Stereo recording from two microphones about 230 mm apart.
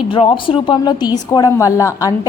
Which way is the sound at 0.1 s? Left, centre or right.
Left.